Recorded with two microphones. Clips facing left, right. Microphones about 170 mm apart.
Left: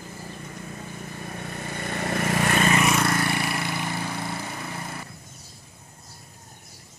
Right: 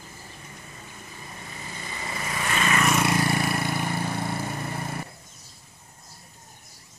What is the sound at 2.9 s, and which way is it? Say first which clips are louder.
Vehicle: even; 5° right (ahead or behind).